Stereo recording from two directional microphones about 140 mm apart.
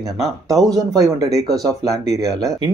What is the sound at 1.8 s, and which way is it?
Speech, 25° right (ahead or behind).